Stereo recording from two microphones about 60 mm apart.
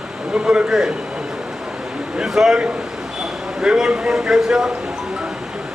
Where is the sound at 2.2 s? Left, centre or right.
Centre.